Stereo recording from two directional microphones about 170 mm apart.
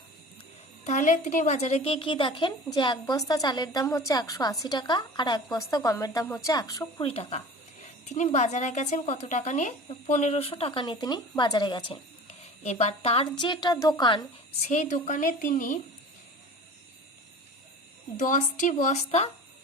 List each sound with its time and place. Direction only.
0.9 s a woman's voice: 45° left (ahead or behind); by 6.8 s 20° left (ahead or behind)
7.0 s a woman's voice: 35° left (ahead or behind)
14.6 s speech: 45° left (ahead or behind)
18.2 s speech: 50° left (ahead or behind)